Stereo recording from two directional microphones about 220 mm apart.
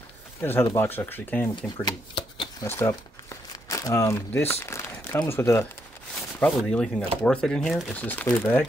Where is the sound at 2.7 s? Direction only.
10° left (ahead or behind).